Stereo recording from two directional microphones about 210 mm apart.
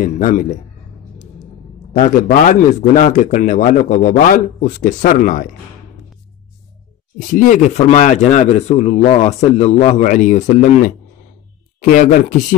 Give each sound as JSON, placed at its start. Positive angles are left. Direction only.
{"t": 0.0, "sound": "a man's voice", "side_deg": 40}
{"t": 7.2, "sound": "speech", "side_deg": 40}